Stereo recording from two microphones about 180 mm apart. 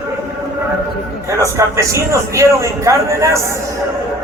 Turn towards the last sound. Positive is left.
turn(degrees=-15)  # may be behind; listen again after turning